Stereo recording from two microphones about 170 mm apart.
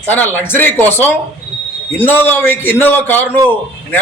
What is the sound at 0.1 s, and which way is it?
A man's voice, 10° left (ahead or behind).